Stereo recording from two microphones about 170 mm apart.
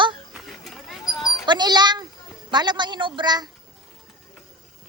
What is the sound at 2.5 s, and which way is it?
A man's voice, 25° right (ahead or behind).